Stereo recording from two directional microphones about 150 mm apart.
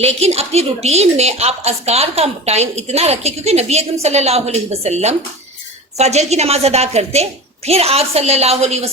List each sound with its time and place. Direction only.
0.0 s a woman's voice: 45° right (ahead or behind)